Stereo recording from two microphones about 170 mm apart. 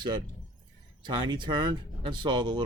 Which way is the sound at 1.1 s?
30° right (ahead or behind).